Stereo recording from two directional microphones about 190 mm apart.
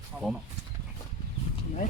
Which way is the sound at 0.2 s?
Centre (ahead or behind).